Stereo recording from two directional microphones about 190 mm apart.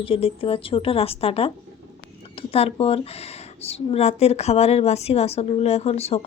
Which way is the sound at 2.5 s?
30° left (ahead or behind).